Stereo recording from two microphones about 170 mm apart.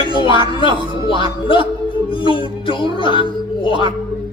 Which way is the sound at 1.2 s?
30° left (ahead or behind).